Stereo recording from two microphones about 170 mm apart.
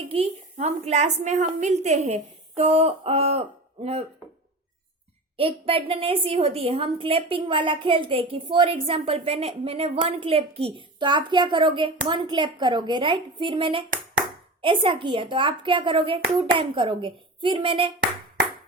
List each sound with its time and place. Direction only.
0.1 s a woman's voice: 40° right (ahead or behind)
5.4 s a woman's voice: 35° right (ahead or behind)